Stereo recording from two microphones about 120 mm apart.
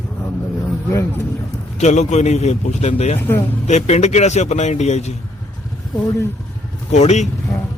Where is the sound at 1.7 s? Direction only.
70° left (ahead or behind).